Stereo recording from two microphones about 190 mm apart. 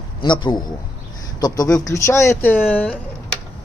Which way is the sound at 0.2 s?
25° left (ahead or behind).